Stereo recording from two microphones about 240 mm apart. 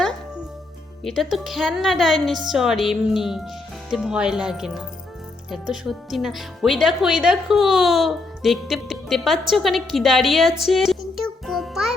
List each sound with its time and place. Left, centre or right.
1.0 s a woman's voice: centre